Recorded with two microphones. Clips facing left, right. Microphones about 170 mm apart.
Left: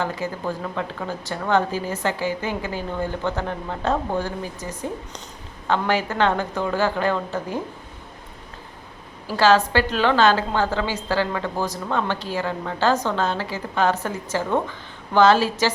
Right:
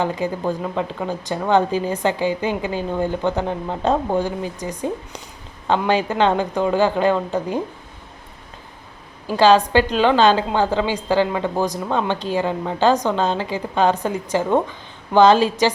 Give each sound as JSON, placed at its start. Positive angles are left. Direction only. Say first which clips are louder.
{"t": 0.0, "sound": "a woman's voice", "louder": "right 4 dB", "side_deg": -15}
{"t": 9.2, "sound": "a woman's voice", "louder": "right 3 dB", "side_deg": -20}